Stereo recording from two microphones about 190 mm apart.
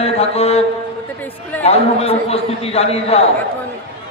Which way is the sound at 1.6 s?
35° left (ahead or behind).